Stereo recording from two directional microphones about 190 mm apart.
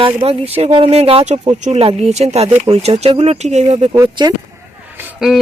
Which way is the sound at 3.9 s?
20° right (ahead or behind).